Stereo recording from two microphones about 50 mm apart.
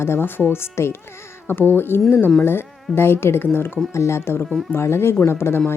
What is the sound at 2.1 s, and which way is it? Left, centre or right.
Speech, left.